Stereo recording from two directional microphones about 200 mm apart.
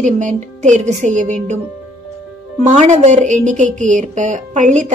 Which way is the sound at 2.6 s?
35° right (ahead or behind).